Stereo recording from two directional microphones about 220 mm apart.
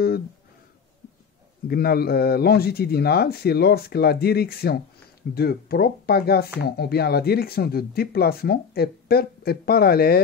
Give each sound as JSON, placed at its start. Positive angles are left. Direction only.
{"t": 1.7, "sound": "speech", "side_deg": 45}